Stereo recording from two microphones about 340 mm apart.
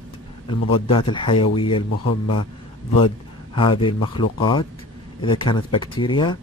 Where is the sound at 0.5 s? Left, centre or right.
Centre.